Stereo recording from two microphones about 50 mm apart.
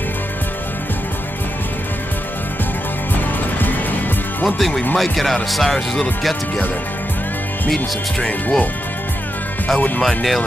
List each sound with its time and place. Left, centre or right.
4.6 s speech: centre
8.2 s speech: left
9.8 s speech: left
10.0 s speech: centre